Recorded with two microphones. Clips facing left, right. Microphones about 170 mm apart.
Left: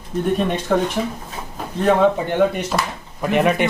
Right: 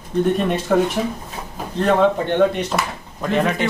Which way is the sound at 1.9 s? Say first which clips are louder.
Left 1 dB; 5° left (ahead or behind).